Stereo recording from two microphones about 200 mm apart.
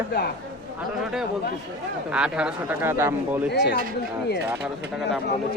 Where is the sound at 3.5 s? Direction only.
55° left (ahead or behind).